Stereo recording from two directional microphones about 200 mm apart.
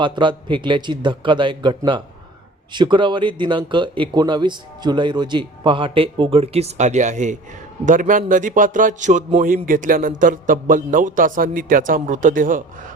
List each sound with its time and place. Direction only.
0.0 s a man's voice: 25° right (ahead or behind); by 12.6 s 40° right (ahead or behind)